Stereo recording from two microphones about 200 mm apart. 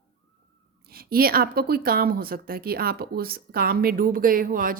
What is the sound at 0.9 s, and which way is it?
A woman's voice, 50° right (ahead or behind).